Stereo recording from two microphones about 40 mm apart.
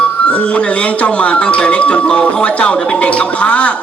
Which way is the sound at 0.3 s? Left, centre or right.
Left.